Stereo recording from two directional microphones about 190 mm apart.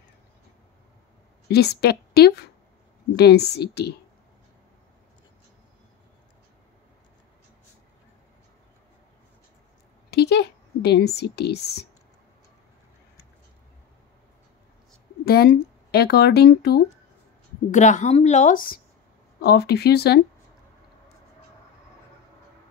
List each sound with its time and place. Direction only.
1.5 s speech: 60° left (ahead or behind)
10.1 s a sound: 60° left (ahead or behind)
15.2 s speech: 55° left (ahead or behind)
17.6 s speech: 40° left (ahead or behind)
19.4 s speech: 55° left (ahead or behind)